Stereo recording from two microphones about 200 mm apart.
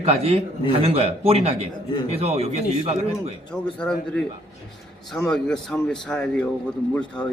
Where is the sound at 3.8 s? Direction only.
5° left (ahead or behind).